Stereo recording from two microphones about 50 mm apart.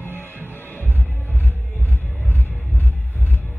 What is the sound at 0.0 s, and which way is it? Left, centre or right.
Music, left.